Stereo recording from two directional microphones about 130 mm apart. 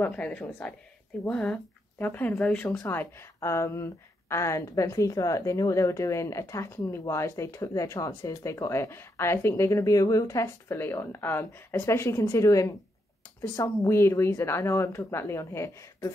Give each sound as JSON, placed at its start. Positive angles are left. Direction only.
{"t": 0.0, "sound": "speech", "side_deg": 10}